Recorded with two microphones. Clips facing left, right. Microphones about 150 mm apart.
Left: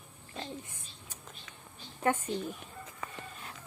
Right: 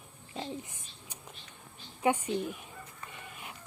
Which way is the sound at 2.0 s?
15° right (ahead or behind).